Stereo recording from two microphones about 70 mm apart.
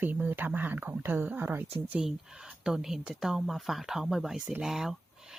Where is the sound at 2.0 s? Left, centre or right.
Centre.